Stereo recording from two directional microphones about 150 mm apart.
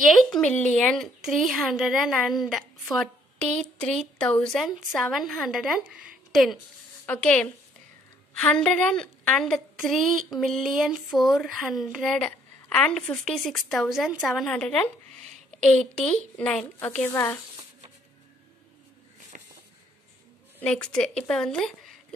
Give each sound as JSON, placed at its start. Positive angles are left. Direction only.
{"t": 0.1, "sound": "a woman's voice", "side_deg": 5}
{"t": 19.3, "sound": "a sound", "side_deg": -55}
{"t": 20.6, "sound": "speech", "side_deg": 5}